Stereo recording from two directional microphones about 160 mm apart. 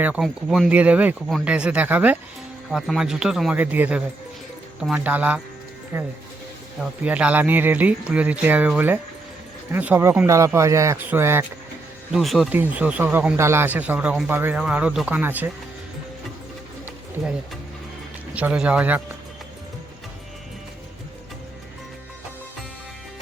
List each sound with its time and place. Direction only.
0.0 s speech: 5° right (ahead or behind)
12.1 s speech: centre (ahead or behind)
18.3 s speech: 5° right (ahead or behind)